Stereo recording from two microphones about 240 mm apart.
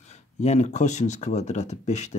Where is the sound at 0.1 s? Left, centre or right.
Left.